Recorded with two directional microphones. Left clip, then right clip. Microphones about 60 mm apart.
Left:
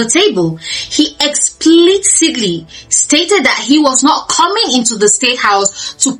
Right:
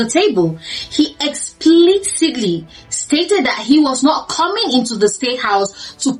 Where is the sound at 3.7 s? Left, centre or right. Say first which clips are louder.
Left 1 dB; left.